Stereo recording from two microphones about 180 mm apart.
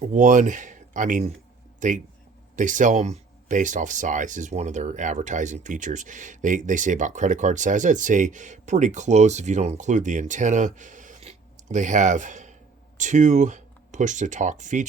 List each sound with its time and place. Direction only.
0.0 s speech: 45° right (ahead or behind)